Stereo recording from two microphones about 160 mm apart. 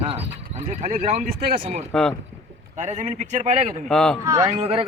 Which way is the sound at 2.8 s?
45° right (ahead or behind).